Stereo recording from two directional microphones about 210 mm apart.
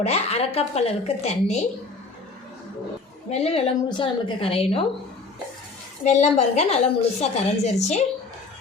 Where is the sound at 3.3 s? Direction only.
30° left (ahead or behind).